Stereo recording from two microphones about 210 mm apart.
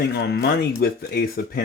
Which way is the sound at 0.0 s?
50° left (ahead or behind).